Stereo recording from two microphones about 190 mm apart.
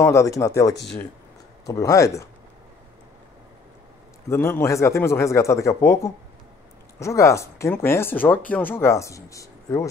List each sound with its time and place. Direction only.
0.0 s speech: 15° left (ahead or behind)
4.3 s speech: 15° left (ahead or behind)